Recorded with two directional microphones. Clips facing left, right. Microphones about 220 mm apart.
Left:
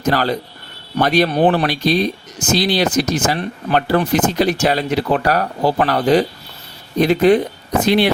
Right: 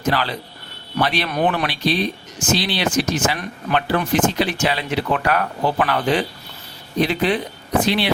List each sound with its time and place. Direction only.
0.0 s speech: 45° left (ahead or behind)